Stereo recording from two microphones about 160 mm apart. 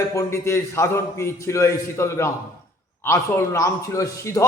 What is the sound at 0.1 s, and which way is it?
A man's voice, 20° left (ahead or behind).